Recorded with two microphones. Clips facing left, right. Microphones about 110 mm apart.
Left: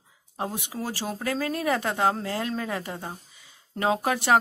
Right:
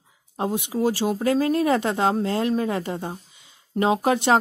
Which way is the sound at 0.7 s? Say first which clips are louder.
Right 9 dB; 20° right (ahead or behind).